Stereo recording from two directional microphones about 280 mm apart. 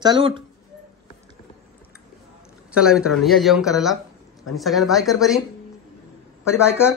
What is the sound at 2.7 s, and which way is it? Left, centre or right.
A man's voice, centre.